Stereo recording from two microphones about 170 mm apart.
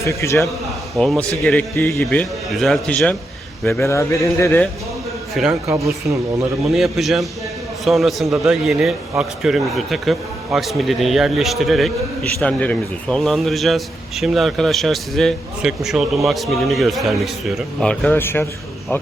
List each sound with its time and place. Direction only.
0.0 s a man's voice: 15° left (ahead or behind)
0.9 s a man's voice: centre (ahead or behind)
1.7 s a man's voice: 15° left (ahead or behind)
2.0 s a man's voice: 5° left (ahead or behind)
5.3 s a man's voice: centre (ahead or behind)
5.6 s speech: 20° right (ahead or behind)
6.7 s a man's voice: centre (ahead or behind)